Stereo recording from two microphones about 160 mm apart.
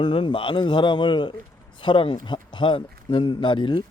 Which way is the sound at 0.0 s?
35° left (ahead or behind).